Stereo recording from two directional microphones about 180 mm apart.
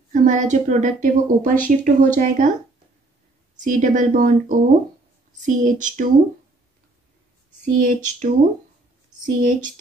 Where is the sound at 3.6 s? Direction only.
45° right (ahead or behind).